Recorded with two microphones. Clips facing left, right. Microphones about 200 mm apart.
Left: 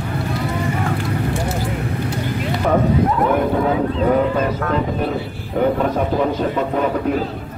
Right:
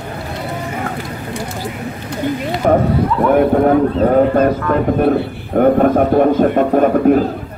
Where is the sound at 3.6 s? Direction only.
45° right (ahead or behind).